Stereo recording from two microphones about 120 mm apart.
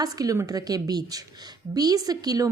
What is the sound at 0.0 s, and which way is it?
A woman's voice, 30° right (ahead or behind).